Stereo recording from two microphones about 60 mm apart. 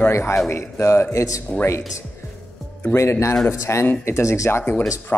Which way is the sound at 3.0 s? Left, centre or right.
Left.